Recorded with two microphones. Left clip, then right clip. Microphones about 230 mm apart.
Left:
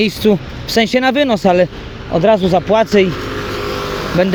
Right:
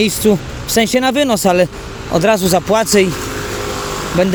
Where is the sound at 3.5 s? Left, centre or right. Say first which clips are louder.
Left 2 dB; left.